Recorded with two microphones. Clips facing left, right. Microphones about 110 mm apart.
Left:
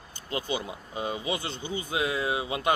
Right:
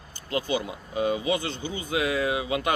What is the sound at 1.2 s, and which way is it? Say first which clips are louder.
Speech: right 5 dB; 25° left (ahead or behind).